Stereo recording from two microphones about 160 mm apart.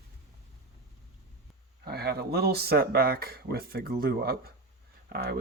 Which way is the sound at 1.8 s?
80° right.